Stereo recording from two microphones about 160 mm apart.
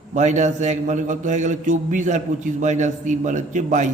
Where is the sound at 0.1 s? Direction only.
50° right (ahead or behind).